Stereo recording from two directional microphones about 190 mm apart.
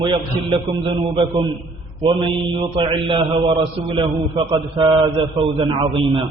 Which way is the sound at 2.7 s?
25° right (ahead or behind).